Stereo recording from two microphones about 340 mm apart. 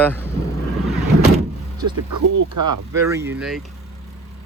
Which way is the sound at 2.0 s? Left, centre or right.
Right.